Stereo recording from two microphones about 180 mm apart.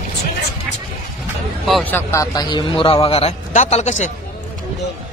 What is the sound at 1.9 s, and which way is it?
A man's voice, 15° left (ahead or behind).